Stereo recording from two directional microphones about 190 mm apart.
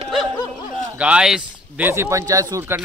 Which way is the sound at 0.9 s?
5° right (ahead or behind).